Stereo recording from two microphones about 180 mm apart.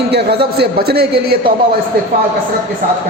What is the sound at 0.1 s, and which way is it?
A man's voice, 65° right (ahead or behind).